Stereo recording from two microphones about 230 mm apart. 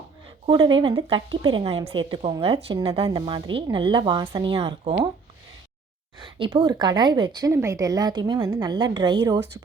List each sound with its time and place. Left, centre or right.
0.4 s a woman's voice: right
6.4 s a woman's voice: centre